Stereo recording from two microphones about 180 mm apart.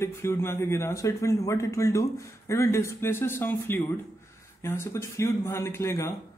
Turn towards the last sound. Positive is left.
turn(degrees=15)  # may be behind; listen again after turning